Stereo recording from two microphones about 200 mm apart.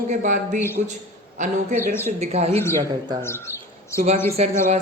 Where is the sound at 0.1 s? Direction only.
40° right (ahead or behind).